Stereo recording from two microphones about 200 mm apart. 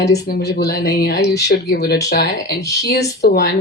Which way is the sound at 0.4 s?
50° left (ahead or behind).